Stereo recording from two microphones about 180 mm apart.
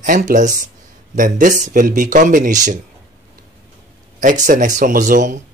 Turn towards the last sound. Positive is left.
turn(degrees=-45)  # may be behind; listen again after turning